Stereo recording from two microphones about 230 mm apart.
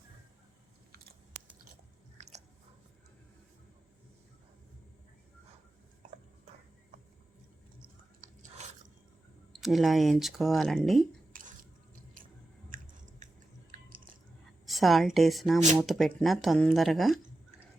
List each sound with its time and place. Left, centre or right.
2.1 s biting: right
8.2 s biting: right
9.5 s speech: centre
12.7 s chewing: right
14.7 s speech: centre